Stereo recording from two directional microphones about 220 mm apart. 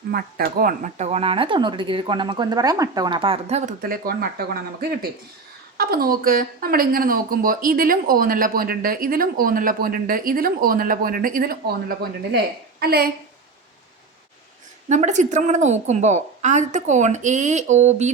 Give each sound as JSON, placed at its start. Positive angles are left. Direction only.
{"t": 0.1, "sound": "a woman's voice", "side_deg": -45}
{"t": 14.8, "sound": "speech", "side_deg": -35}